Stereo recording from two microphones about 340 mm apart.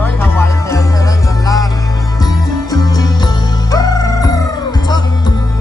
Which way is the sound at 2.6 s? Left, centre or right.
Centre.